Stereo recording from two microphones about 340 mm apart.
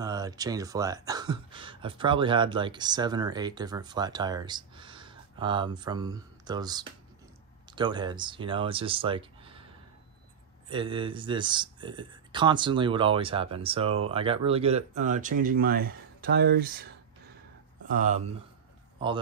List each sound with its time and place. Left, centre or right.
0.0 s speech: centre
10.7 s speech: centre
17.9 s speech: right